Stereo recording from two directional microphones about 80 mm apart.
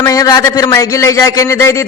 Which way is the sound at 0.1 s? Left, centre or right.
Left.